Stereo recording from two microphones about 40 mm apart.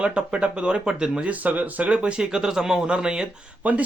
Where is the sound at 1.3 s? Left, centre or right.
Right.